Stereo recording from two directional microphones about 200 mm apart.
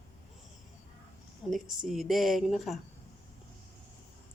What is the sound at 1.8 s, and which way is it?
Speech, centre (ahead or behind).